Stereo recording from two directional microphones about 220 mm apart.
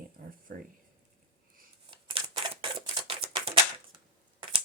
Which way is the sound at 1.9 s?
20° right (ahead or behind).